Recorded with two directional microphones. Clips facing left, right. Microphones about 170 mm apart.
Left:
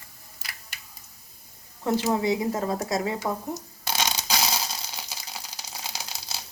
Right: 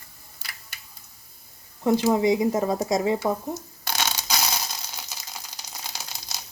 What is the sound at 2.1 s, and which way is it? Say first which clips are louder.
Speech: right 4 dB; 20° right (ahead or behind).